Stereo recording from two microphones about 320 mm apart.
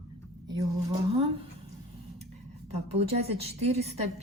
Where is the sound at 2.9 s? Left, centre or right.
Centre.